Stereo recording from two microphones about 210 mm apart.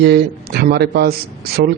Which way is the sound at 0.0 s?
50° right (ahead or behind).